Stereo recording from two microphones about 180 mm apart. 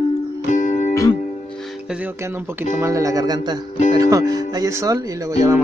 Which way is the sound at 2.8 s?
15° right (ahead or behind).